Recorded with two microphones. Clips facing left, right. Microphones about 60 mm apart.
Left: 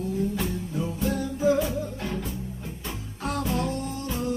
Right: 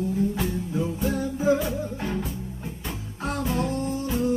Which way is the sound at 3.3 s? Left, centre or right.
Right.